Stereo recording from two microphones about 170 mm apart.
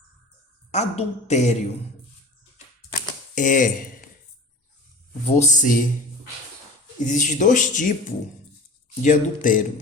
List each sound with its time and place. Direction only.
0.7 s speech: 40° left (ahead or behind)
3.3 s speech: 50° left (ahead or behind)
5.2 s speech: 45° left (ahead or behind)
7.0 s speech: 50° left (ahead or behind)
9.0 s speech: 50° left (ahead or behind)